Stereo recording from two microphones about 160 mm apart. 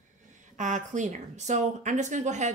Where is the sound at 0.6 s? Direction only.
50° right (ahead or behind).